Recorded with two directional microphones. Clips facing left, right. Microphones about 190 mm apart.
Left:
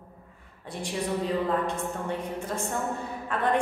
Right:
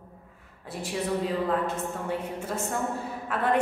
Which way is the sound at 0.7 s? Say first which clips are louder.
Right 1 dB; 5° right (ahead or behind).